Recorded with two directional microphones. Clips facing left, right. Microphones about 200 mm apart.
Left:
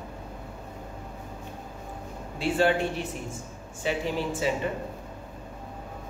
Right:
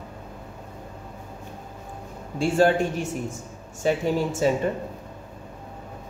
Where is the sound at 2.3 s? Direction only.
45° right (ahead or behind).